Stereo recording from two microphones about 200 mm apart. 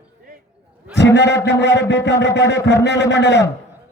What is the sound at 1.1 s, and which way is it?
A man's voice, 60° left (ahead or behind).